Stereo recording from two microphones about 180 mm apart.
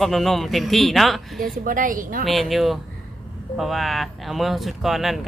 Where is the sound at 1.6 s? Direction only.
50° right (ahead or behind).